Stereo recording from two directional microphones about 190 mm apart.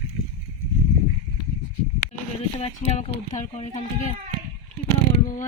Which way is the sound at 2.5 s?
35° left (ahead or behind).